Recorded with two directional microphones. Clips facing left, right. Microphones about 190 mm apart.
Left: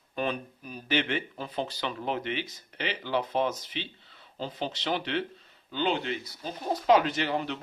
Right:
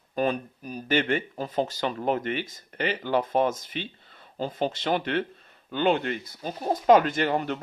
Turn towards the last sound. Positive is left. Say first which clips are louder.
# right 4 dB
turn(degrees=-50)  # may be behind; listen again after turning